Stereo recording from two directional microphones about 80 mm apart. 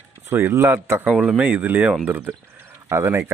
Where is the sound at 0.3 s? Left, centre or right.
Right.